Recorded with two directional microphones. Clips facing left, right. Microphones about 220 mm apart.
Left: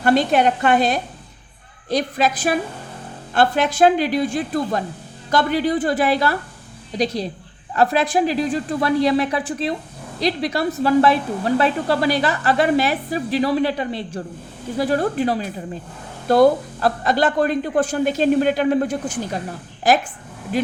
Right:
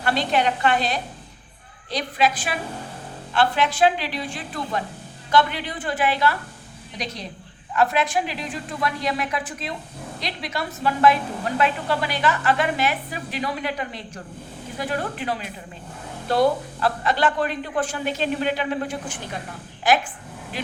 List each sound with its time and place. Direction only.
0.0 s a woman's voice: 45° left (ahead or behind)